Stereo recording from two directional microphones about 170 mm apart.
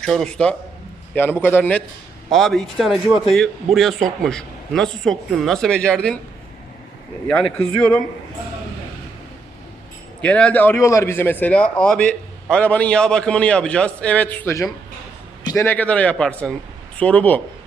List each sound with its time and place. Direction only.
0.0 s speech: 5° left (ahead or behind)
7.3 s speech: 5° left (ahead or behind)
10.2 s speech: 5° left (ahead or behind)